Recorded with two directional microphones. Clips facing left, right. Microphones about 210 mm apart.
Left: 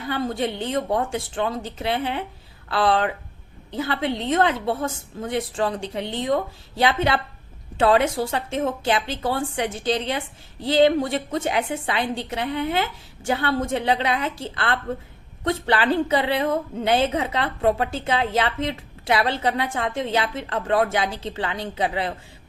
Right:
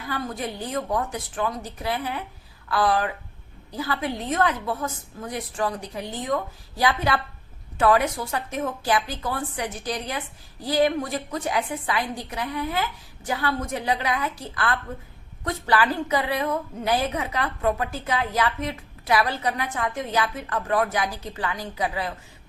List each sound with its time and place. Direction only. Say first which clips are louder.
0.1 s a woman's voice: left 5 dB; 25° left (ahead or behind)